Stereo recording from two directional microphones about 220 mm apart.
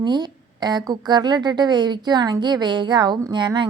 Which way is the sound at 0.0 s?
20° right (ahead or behind).